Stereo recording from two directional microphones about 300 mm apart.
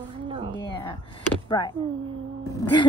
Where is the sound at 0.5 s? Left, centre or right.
Centre.